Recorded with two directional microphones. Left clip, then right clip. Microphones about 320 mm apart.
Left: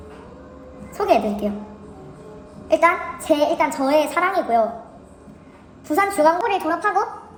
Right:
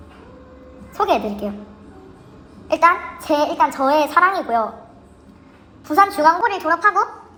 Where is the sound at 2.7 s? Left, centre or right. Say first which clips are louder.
Right 2 dB; centre.